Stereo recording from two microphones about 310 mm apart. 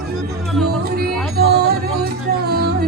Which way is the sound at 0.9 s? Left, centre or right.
Right.